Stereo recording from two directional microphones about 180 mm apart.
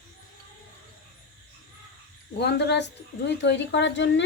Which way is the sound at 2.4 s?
70° left (ahead or behind).